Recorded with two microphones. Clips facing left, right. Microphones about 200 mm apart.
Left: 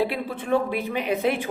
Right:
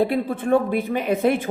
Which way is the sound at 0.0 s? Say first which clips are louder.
Right 5 dB; 50° right (ahead or behind).